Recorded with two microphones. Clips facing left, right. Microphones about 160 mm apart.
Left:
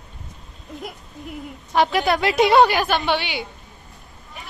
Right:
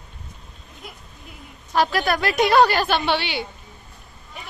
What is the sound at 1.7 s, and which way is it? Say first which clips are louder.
A woman's voice: left 2 dB; 20° left (ahead or behind).